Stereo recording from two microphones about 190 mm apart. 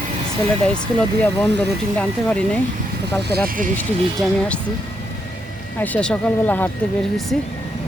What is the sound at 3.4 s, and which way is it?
Speech, 45° right (ahead or behind).